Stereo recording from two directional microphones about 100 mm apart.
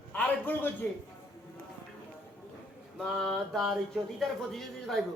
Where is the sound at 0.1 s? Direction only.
15° left (ahead or behind).